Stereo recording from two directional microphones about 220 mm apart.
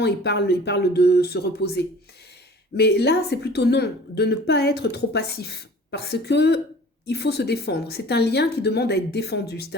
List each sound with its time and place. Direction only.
0.0 s a woman's voice: 50° left (ahead or behind)